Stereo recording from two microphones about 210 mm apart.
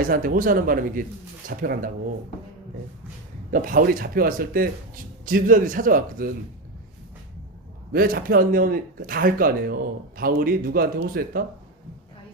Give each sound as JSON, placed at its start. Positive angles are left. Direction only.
{"t": 0.0, "sound": "a man's voice", "side_deg": -40}
{"t": 3.5, "sound": "a man's voice", "side_deg": -40}
{"t": 7.9, "sound": "speech", "side_deg": -45}